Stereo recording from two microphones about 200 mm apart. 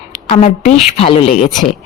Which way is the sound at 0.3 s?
35° left (ahead or behind).